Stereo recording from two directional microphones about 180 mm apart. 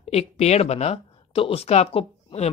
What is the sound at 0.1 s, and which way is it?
Speech, 35° left (ahead or behind).